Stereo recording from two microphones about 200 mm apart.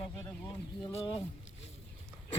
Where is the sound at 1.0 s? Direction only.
25° left (ahead or behind).